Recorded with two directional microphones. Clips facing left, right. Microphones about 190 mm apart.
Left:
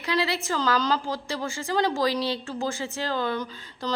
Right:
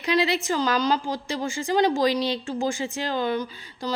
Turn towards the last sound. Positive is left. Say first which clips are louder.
# right 1 dB
turn(degrees=-10)  # may be behind; listen again after turning